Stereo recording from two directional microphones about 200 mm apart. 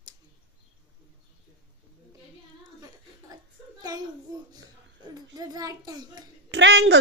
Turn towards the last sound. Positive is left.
turn(degrees=-65)  # may be behind; listen again after turning